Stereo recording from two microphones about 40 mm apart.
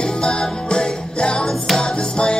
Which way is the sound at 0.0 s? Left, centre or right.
Left.